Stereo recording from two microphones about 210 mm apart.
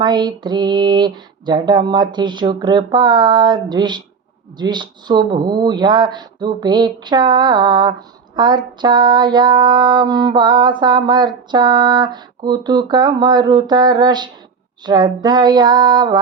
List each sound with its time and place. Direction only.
0.0 s speech: 20° right (ahead or behind)